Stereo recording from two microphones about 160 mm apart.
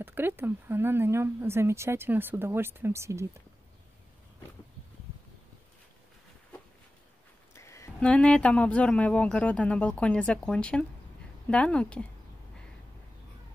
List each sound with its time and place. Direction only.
0.0 s speech: 15° right (ahead or behind)
7.5 s a sound: 20° left (ahead or behind)
8.0 s speech: 5° left (ahead or behind)